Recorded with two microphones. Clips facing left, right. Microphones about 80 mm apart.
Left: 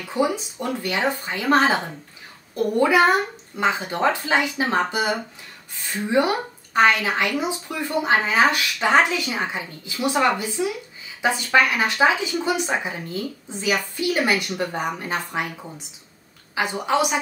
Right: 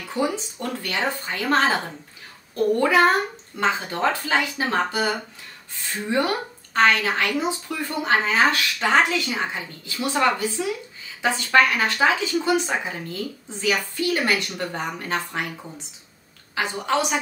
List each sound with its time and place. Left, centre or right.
0.1 s speech: centre
16.5 s speech: centre